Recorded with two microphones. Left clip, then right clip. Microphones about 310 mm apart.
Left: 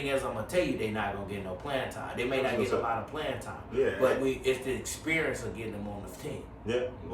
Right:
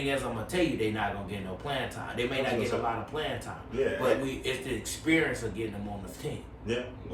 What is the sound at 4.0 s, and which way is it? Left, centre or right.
Speech, centre.